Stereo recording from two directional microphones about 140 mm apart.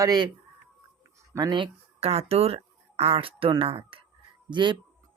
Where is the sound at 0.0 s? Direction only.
30° right (ahead or behind).